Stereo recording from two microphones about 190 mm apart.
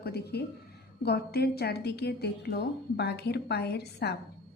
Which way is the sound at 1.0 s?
55° left (ahead or behind).